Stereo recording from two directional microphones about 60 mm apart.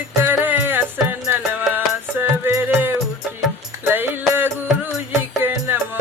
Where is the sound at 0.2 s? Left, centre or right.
Right.